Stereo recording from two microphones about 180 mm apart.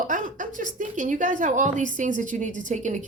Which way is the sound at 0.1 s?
45° right (ahead or behind).